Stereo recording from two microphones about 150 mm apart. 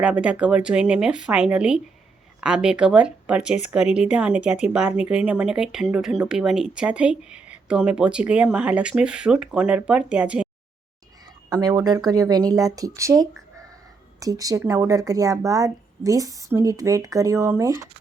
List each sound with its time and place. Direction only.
0.0 s speech: 5° right (ahead or behind)
11.4 s speech: 25° right (ahead or behind)